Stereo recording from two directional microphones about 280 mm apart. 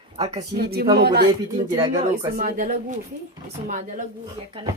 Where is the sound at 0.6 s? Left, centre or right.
Right.